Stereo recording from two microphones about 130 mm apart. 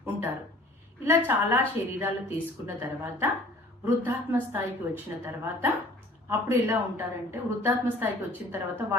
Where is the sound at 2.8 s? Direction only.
20° right (ahead or behind).